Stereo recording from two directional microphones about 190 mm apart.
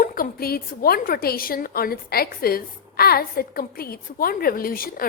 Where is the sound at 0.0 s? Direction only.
50° left (ahead or behind).